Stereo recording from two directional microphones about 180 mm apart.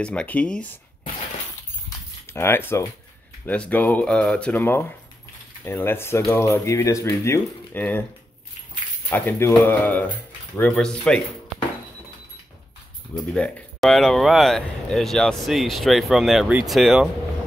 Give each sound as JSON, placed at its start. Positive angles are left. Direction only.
{"t": 0.0, "sound": "speech", "side_deg": 5}
{"t": 1.9, "sound": "keys jangling", "side_deg": 15}
{"t": 3.4, "sound": "speech", "side_deg": 10}
{"t": 9.1, "sound": "speech", "side_deg": 15}
{"t": 13.1, "sound": "speech", "side_deg": 5}